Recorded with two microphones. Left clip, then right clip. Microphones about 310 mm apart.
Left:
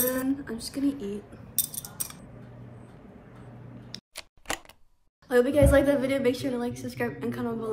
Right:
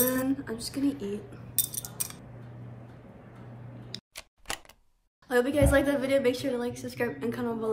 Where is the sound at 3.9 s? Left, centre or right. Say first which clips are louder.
Left 1 dB; centre.